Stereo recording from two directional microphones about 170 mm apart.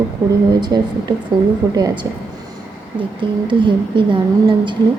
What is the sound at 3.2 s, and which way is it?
Speech, 30° right (ahead or behind).